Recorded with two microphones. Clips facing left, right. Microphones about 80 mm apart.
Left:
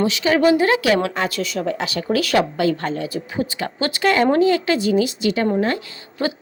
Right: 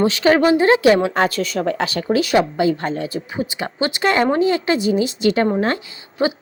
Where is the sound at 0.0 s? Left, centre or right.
Right.